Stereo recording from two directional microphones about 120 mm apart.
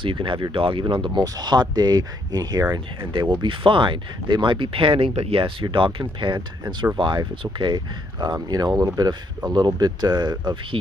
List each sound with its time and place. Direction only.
0.0 s speech: 45° right (ahead or behind)